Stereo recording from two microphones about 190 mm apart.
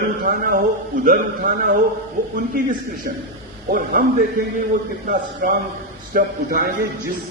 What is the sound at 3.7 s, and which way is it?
A man's voice, 50° right (ahead or behind).